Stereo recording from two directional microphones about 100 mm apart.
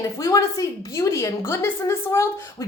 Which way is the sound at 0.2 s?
30° left (ahead or behind).